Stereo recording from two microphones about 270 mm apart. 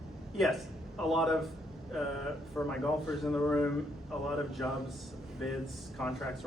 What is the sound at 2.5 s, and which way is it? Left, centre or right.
Speech, centre.